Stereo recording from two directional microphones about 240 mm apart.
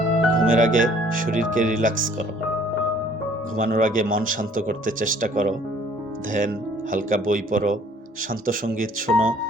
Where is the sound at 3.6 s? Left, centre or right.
Right.